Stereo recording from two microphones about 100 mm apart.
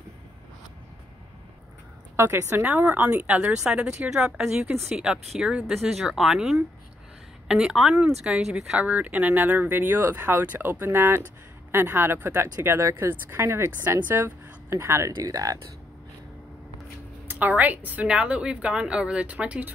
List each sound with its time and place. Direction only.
2.1 s a woman's voice: 25° right (ahead or behind)
17.3 s speech: 15° right (ahead or behind)